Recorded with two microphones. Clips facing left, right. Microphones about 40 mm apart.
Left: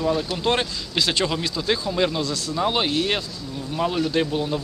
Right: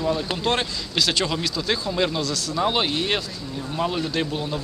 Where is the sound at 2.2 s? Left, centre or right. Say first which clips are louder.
Even; centre.